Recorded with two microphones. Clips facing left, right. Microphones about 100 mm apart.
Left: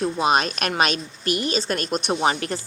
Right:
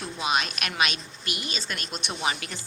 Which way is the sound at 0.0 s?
45° left (ahead or behind).